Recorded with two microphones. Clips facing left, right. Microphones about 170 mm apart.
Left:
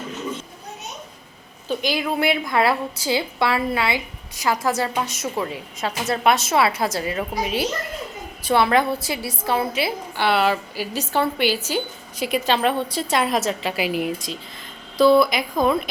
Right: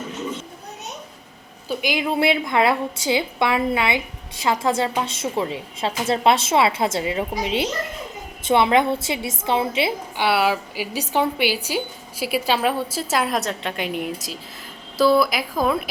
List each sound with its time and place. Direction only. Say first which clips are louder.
1.6 s a woman's voice: even; 15° right (ahead or behind)
2.0 s a woman's voice: right 3 dB; 25° right (ahead or behind)
10.2 s a woman's voice: left 1 dB; 10° right (ahead or behind)